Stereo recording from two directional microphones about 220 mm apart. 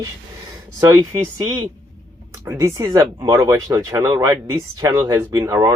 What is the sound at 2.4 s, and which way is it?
Speech, 15° right (ahead or behind).